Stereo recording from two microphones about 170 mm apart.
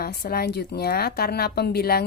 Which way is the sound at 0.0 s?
65° left (ahead or behind).